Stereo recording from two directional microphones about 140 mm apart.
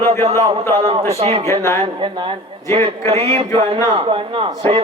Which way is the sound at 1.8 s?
35° right (ahead or behind).